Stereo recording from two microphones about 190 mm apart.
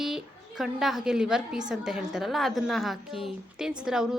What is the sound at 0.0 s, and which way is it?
A woman's voice, centre (ahead or behind).